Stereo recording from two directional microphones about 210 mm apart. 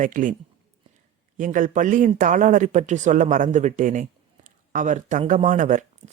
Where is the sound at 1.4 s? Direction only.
40° right (ahead or behind).